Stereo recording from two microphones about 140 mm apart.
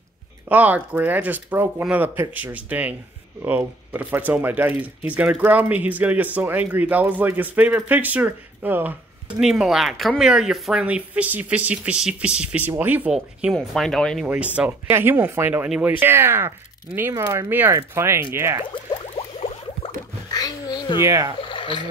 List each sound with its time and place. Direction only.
0.5 s speech: 10° right (ahead or behind)
14.2 s speech: 10° right (ahead or behind)
18.9 s a sound: 45° left (ahead or behind)
20.3 s speech: 25° left (ahead or behind)
21.0 s speech: 20° right (ahead or behind)
21.4 s a sound: 35° left (ahead or behind)